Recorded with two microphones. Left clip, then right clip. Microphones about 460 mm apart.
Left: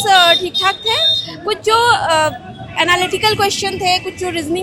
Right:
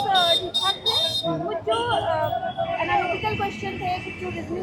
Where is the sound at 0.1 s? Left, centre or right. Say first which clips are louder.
Left 11 dB; left.